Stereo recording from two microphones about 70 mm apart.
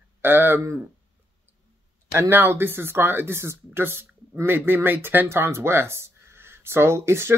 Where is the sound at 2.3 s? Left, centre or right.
Right.